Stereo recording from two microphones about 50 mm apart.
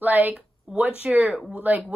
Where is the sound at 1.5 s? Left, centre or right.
Right.